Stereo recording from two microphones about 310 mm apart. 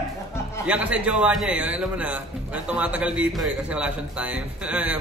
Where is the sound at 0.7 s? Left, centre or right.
Centre.